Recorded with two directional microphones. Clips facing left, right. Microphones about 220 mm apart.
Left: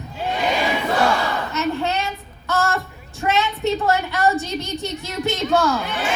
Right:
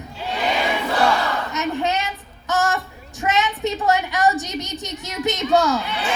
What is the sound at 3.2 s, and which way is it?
Child singing, 15° right (ahead or behind).